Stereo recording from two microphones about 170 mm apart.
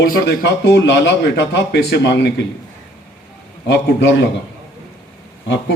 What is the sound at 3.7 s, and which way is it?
Speech, 90° left.